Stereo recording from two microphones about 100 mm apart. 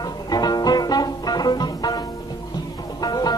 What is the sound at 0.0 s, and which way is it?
Music, 40° left (ahead or behind).